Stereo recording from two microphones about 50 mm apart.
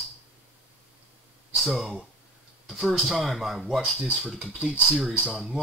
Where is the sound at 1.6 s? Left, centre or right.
Centre.